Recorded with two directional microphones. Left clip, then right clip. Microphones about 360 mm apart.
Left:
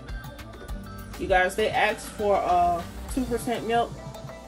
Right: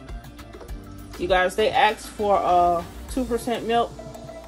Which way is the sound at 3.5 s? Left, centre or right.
Right.